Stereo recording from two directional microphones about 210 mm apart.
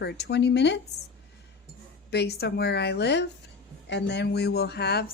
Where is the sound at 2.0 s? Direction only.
50° left (ahead or behind).